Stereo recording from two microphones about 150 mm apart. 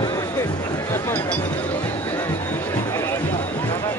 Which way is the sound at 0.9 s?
15° left (ahead or behind).